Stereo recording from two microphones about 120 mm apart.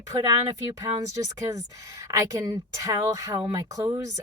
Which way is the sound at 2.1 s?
30° right (ahead or behind).